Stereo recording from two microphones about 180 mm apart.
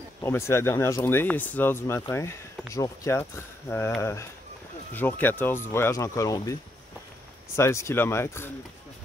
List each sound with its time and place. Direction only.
0.2 s speech: 15° left (ahead or behind)